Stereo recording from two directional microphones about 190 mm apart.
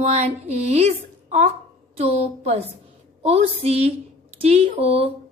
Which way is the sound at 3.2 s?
35° right (ahead or behind).